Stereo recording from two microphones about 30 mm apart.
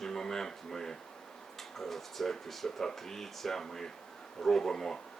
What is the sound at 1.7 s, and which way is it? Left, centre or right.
Speech, centre.